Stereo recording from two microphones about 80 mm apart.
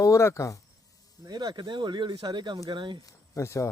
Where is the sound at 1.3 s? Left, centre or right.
Right.